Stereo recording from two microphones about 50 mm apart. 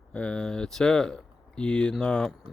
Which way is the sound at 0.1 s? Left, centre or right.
Left.